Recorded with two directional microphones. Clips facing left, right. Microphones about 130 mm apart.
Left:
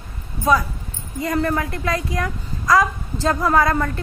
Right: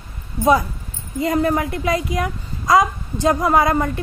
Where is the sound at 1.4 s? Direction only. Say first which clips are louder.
Right 3 dB; 15° right (ahead or behind).